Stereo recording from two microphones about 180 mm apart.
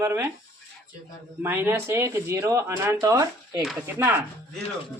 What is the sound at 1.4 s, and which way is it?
Speech, 15° right (ahead or behind).